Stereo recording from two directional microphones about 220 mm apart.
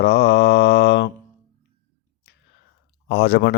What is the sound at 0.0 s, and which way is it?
Mantra, 55° left (ahead or behind).